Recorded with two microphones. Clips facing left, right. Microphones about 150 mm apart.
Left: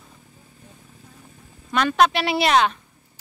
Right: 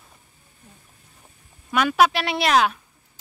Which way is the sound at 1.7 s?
5° right (ahead or behind).